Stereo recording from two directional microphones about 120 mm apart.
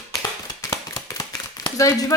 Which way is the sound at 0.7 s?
25° left (ahead or behind).